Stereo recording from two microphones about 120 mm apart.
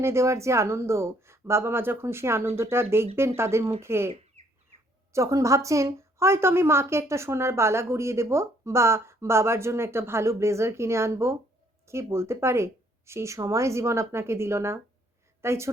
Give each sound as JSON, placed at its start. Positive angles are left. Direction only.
{"t": 0.0, "sound": "a woman's voice", "side_deg": -25}
{"t": 5.1, "sound": "a woman's voice", "side_deg": -25}